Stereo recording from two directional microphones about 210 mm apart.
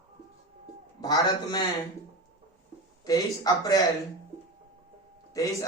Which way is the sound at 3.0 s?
15° left (ahead or behind).